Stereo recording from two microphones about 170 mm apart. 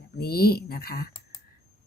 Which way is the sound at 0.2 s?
65° left (ahead or behind).